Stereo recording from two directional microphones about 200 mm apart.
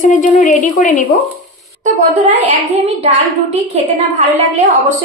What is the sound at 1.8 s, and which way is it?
A child's voice, 35° right (ahead or behind).